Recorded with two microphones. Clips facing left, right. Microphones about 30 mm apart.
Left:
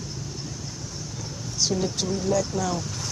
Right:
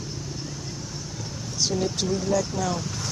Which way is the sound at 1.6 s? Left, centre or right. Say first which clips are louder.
Even; centre.